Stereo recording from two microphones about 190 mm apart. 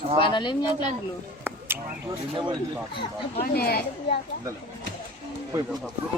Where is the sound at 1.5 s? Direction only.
10° right (ahead or behind).